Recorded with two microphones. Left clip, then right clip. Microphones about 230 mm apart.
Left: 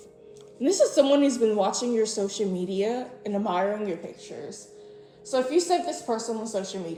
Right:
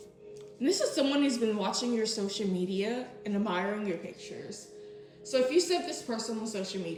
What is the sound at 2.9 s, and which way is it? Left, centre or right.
Speech, left.